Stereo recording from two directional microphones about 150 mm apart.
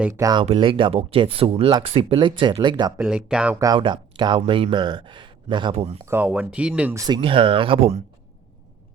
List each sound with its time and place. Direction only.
0.1 s speech: 25° right (ahead or behind)
0.4 s speech: 35° right (ahead or behind)
3.0 s speech: 5° right (ahead or behind)
3.8 s speech: 30° right (ahead or behind)
6.1 s speech: 10° right (ahead or behind)
6.9 s speech: 25° right (ahead or behind)
7.2 s speech: 35° right (ahead or behind)